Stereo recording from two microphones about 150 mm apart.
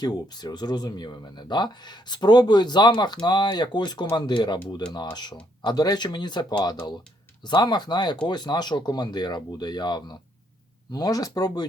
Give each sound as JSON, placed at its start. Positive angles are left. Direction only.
{"t": 0.0, "sound": "speech", "side_deg": 25}